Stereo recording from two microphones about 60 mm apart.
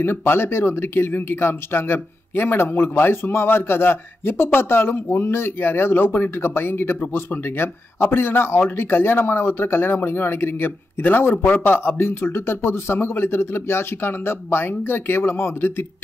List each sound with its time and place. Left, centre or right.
0.0 s speech: left
11.3 s a man's voice: left
11.6 s speech: left